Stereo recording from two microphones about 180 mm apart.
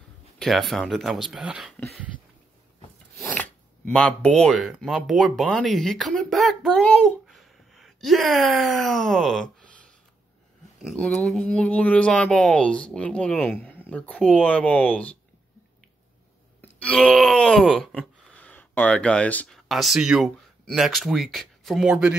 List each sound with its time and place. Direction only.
0.4 s speech: centre (ahead or behind)
3.2 s sneeze: 10° left (ahead or behind)
3.9 s speech: 5° left (ahead or behind)
10.8 s speech: centre (ahead or behind)
16.8 s groan: 5° left (ahead or behind)